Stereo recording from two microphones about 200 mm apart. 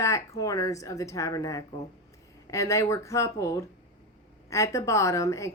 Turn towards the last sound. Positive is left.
turn(degrees=15)  # may be behind; listen again after turning